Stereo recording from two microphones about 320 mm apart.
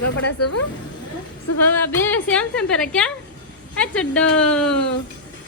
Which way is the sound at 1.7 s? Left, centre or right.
Centre.